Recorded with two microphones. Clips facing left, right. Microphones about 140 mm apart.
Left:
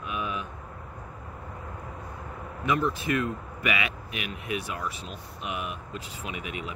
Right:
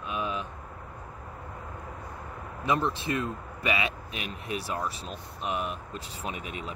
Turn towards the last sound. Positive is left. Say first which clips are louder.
# even
turn(degrees=-35)  # may be behind; listen again after turning